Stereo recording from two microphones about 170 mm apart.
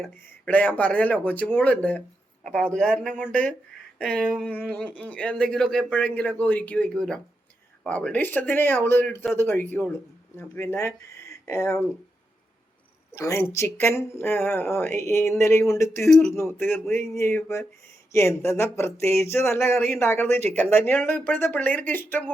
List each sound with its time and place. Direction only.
0.0 s speech: 10° left (ahead or behind)
13.1 s speech: 15° left (ahead or behind)
16.0 s speech: 5° left (ahead or behind)
16.3 s speech: 15° left (ahead or behind)